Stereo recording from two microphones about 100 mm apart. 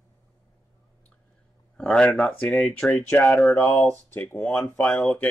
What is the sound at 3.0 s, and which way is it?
Speech, 20° left (ahead or behind).